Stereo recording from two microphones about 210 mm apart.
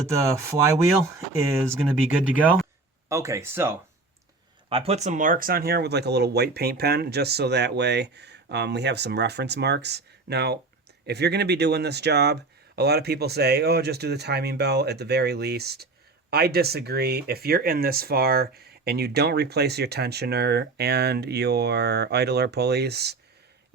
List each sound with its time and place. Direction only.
0.1 s speech: 15° right (ahead or behind)
1.7 s speech: 5° right (ahead or behind)
4.7 s speech: 30° right (ahead or behind); by 23.1 s 50° right (ahead or behind)